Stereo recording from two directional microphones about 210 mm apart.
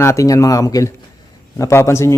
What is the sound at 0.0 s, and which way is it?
Speech, 15° left (ahead or behind).